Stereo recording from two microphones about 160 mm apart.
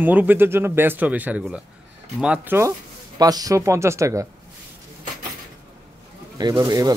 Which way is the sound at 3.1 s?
25° right (ahead or behind).